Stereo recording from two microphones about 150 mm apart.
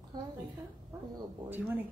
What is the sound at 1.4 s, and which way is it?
Speech, 15° right (ahead or behind).